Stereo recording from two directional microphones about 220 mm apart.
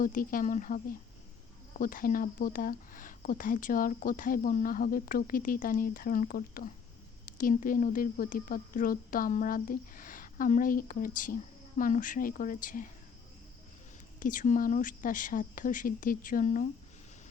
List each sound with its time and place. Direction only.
0.0 s speech: 40° left (ahead or behind)
14.2 s speech: 35° left (ahead or behind)